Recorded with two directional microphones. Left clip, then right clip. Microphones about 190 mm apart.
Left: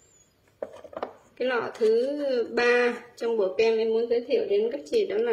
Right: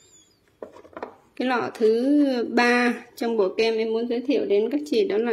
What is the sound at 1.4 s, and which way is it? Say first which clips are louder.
Speech: right 2 dB; 45° right (ahead or behind).